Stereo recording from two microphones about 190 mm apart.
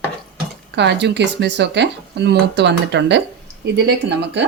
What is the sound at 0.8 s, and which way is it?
Speech, 65° right (ahead or behind).